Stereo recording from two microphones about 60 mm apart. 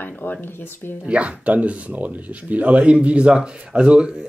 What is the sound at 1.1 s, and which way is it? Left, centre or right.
Speech, right.